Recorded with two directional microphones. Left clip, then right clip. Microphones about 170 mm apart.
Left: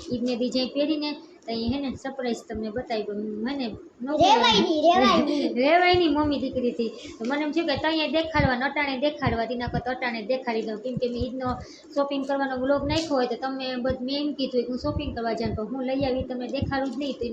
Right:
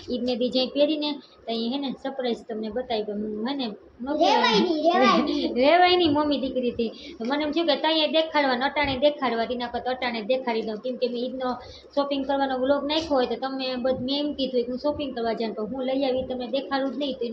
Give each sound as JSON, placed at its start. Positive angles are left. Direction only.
{"t": 0.1, "sound": "a woman's voice", "side_deg": 0}
{"t": 4.2, "sound": "a child's voice", "side_deg": 40}
{"t": 5.4, "sound": "a woman's voice", "side_deg": -5}